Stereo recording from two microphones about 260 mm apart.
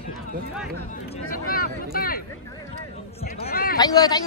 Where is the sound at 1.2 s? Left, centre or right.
Left.